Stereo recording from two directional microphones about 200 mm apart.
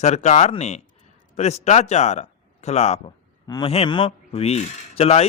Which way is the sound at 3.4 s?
20° left (ahead or behind).